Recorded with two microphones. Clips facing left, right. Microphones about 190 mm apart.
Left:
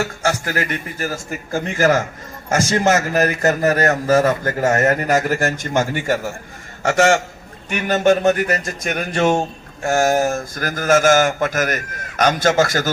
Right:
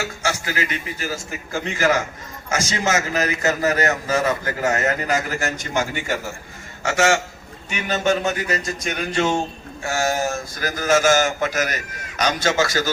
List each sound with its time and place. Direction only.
0.0 s a man's voice: 50° left (ahead or behind)